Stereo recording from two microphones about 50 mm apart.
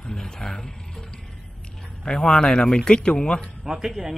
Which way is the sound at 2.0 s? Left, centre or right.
Centre.